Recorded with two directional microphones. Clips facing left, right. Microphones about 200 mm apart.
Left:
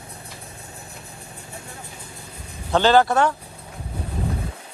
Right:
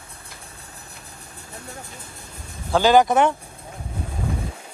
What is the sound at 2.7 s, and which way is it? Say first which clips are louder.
Speech: right 1 dB; 10° right (ahead or behind).